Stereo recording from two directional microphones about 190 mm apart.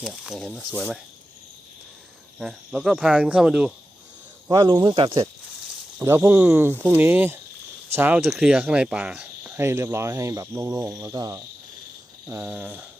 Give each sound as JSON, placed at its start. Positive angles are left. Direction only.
{"t": 0.0, "sound": "speech", "side_deg": 0}
{"t": 2.4, "sound": "speech", "side_deg": -5}
{"t": 4.4, "sound": "speech", "side_deg": -20}
{"t": 6.0, "sound": "speech", "side_deg": -10}
{"t": 12.3, "sound": "speech", "side_deg": -5}